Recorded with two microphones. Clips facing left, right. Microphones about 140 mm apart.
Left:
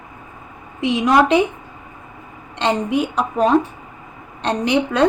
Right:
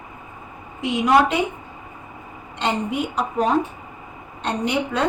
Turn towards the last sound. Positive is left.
turn(degrees=90)